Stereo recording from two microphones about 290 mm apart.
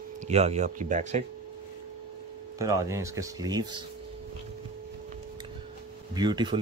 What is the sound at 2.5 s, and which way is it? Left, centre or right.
Speech, centre.